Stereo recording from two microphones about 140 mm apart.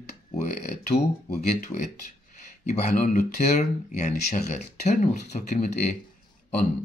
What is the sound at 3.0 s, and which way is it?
Speech, 60° left (ahead or behind).